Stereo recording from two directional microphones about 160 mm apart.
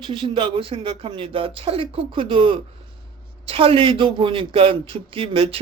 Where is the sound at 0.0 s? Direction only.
30° right (ahead or behind).